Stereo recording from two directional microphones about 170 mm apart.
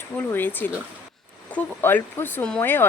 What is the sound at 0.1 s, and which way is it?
Speech, 10° left (ahead or behind).